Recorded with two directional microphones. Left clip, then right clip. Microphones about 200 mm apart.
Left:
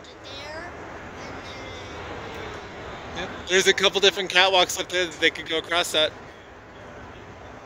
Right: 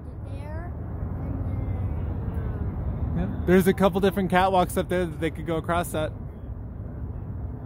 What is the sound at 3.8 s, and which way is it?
Speech, 20° right (ahead or behind).